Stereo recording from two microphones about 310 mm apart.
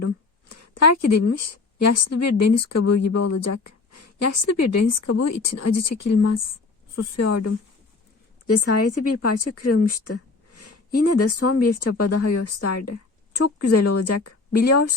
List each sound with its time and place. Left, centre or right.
0.5 s a woman's voice: left
10.5 s a sound: left
11.5 s speech: left